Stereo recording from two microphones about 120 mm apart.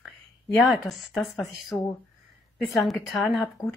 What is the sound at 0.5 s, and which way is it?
A woman's voice, centre (ahead or behind).